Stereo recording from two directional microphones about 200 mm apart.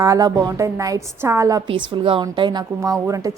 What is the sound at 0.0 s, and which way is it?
A woman's voice, 15° right (ahead or behind).